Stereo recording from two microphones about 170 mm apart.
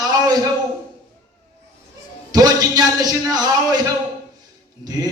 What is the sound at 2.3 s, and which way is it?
A man's voice, 20° right (ahead or behind).